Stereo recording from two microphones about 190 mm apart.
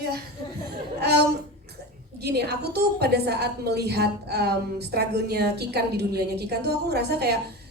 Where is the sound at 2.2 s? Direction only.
60° right (ahead or behind).